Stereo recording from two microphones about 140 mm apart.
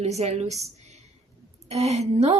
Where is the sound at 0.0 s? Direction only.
50° right (ahead or behind).